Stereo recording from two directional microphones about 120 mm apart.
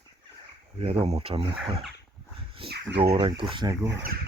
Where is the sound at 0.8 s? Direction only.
55° right (ahead or behind).